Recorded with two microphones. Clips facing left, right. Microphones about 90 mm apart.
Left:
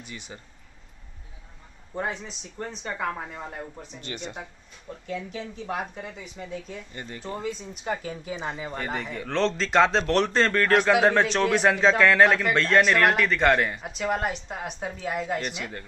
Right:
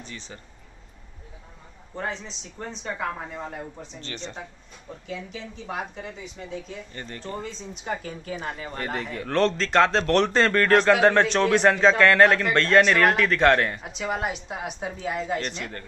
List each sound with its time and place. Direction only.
0.0 s speech: 10° left (ahead or behind)
2.0 s a man's voice: 10° left (ahead or behind)
6.9 s a man's voice: 10° left (ahead or behind)